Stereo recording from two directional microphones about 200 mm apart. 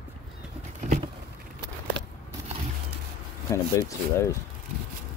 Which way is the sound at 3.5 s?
15° left (ahead or behind).